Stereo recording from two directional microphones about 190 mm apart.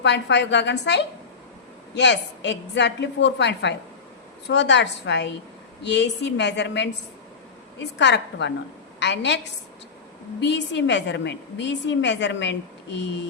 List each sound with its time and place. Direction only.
0.0 s a woman's voice: 65° left (ahead or behind)
10.4 s a woman's voice: 70° left (ahead or behind)